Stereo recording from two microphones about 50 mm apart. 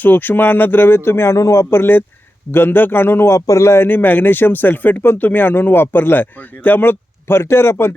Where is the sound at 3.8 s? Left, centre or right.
Left.